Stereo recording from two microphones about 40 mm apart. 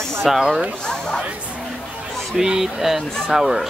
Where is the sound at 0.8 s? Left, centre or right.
Centre.